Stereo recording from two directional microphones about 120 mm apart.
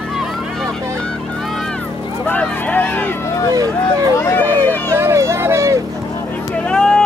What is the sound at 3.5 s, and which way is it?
Speech, 30° right (ahead or behind).